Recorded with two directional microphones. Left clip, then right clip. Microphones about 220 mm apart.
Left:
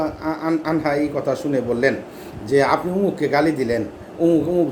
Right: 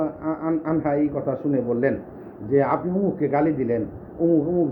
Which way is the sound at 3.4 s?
5° left (ahead or behind).